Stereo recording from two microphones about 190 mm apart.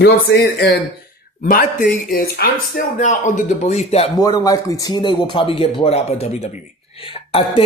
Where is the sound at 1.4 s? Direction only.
45° left (ahead or behind).